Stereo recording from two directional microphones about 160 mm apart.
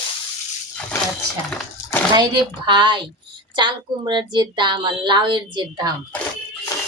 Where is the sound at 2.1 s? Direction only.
30° right (ahead or behind).